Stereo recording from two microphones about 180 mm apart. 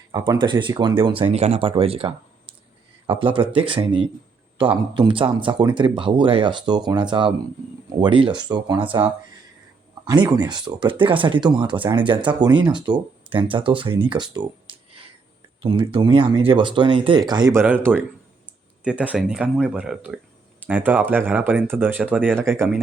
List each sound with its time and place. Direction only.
0.1 s speech: 25° right (ahead or behind)
10.1 s speech: 20° right (ahead or behind)
18.8 s speech: 5° right (ahead or behind)